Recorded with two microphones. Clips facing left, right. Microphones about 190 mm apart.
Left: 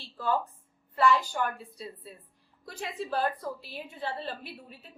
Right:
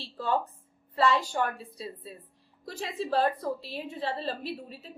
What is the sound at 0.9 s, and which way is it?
A woman's voice, 25° right (ahead or behind).